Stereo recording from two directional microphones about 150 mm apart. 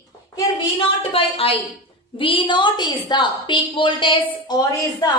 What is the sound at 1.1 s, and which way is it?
A woman's voice, 40° left (ahead or behind).